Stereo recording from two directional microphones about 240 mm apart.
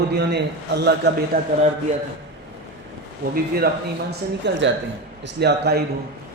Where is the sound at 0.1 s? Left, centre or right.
Right.